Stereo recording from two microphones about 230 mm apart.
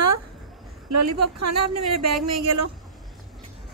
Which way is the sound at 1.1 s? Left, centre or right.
Right.